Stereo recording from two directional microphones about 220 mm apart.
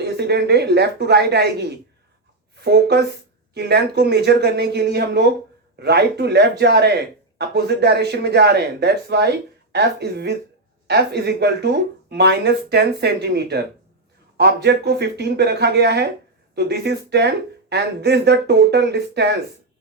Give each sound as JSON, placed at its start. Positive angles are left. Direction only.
{"t": 0.0, "sound": "speech", "side_deg": -50}